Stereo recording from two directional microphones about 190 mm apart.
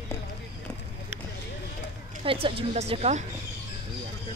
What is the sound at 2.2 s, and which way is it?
A woman's voice, 30° right (ahead or behind).